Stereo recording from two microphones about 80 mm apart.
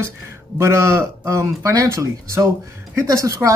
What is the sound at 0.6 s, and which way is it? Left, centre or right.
Speech, right.